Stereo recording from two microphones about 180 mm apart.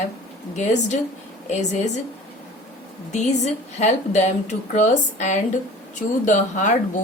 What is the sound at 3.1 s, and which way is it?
A woman's voice, 40° left (ahead or behind).